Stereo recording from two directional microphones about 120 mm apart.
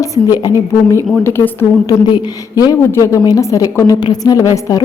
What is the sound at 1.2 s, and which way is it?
A woman's voice, 20° left (ahead or behind).